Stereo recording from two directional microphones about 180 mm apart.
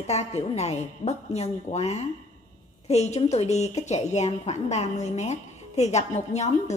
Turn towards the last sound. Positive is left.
turn(degrees=40)  # may be behind; listen again after turning